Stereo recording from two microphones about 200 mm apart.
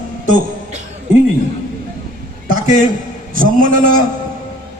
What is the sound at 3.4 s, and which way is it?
Speech, 45° right (ahead or behind).